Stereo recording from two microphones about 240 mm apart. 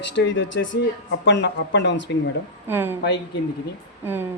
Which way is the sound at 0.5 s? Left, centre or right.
Left.